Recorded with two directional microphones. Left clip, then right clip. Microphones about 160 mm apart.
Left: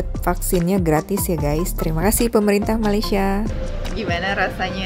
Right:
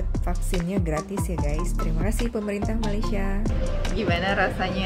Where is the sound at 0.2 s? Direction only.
55° left (ahead or behind).